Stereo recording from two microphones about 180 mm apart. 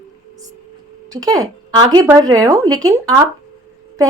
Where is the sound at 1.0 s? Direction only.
20° right (ahead or behind).